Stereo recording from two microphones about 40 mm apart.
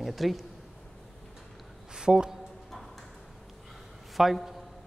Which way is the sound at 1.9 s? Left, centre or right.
Centre.